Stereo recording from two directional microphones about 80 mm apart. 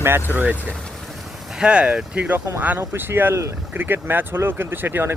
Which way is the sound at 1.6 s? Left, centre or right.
Centre.